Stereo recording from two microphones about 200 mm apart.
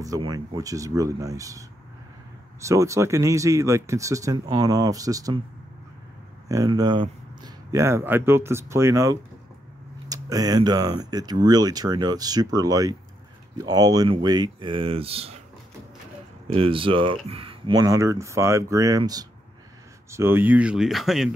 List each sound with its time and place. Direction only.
0.0 s speech: 20° right (ahead or behind)
2.6 s speech: 15° right (ahead or behind)
6.5 s speech: 20° right (ahead or behind)
16.5 s speech: 25° right (ahead or behind); by 21.3 s centre (ahead or behind)